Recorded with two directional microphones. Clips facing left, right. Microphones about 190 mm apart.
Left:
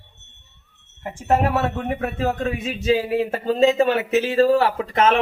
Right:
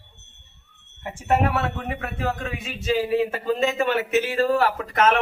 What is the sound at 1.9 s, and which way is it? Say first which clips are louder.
Speech: left 5 dB; 35° left (ahead or behind).